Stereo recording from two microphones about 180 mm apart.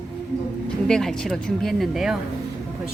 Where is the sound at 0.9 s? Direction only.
5° left (ahead or behind).